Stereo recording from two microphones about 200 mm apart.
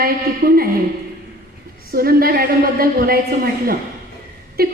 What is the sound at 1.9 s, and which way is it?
A woman's voice, 50° right (ahead or behind).